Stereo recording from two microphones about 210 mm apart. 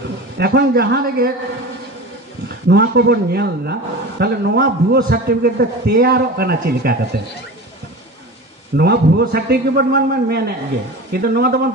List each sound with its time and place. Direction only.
0.4 s a man's voice: 45° right (ahead or behind)
2.4 s a man's voice: 50° right (ahead or behind)
8.7 s a man's voice: 50° right (ahead or behind)